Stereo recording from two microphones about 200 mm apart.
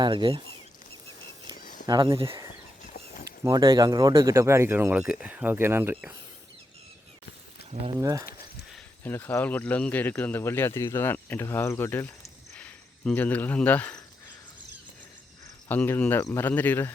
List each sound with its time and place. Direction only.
0.0 s speech: 25° right (ahead or behind)
1.6 s a sound: 40° left (ahead or behind)
1.9 s speech: 25° right (ahead or behind)
2.8 s a sound: 40° left (ahead or behind)
3.4 s speech: 20° right (ahead or behind)
7.9 s speech: 15° right (ahead or behind)
8.7 s speech: 10° left (ahead or behind)
12.5 s cricket: 5° left (ahead or behind)
15.7 s speech: 10° left (ahead or behind)